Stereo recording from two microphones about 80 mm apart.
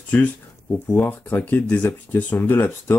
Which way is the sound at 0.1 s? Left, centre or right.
Centre.